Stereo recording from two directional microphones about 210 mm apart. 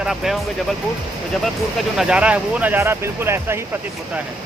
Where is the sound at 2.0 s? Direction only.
5° right (ahead or behind).